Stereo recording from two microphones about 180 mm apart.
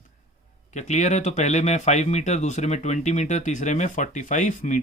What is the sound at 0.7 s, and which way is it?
Speech, 40° left (ahead or behind).